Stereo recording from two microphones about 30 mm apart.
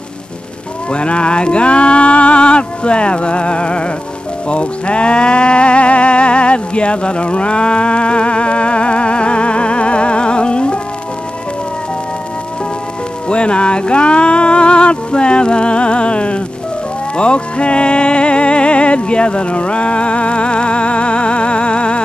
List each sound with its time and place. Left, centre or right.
0.9 s speech: left
13.3 s speech: left